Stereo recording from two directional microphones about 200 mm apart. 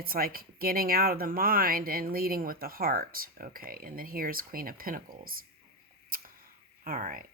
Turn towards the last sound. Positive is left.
turn(degrees=-45)  # may be behind; listen again after turning